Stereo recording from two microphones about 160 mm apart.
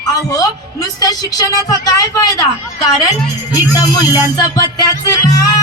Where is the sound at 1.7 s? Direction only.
25° left (ahead or behind).